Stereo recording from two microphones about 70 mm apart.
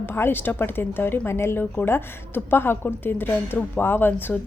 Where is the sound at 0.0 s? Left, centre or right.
Left.